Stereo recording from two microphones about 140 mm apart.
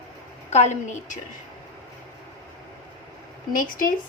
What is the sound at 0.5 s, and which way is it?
Speech, 55° left (ahead or behind).